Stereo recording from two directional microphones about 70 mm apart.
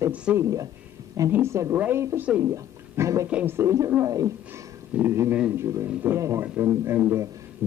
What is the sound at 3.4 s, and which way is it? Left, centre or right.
Speech, right.